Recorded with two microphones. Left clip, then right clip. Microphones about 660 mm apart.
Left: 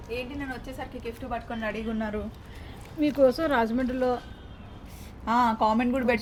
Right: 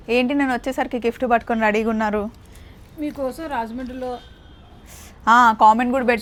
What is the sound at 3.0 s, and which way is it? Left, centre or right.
Speech, centre.